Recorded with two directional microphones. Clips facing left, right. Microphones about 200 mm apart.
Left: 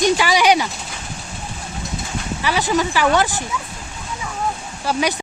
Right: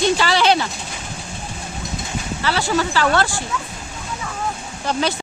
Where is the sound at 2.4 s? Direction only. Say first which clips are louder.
Left 1 dB; 15° left (ahead or behind).